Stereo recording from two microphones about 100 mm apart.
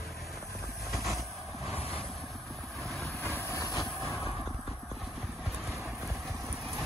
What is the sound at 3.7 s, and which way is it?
Vehicle, centre (ahead or behind).